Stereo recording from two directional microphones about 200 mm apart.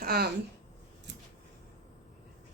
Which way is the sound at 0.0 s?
50° right (ahead or behind).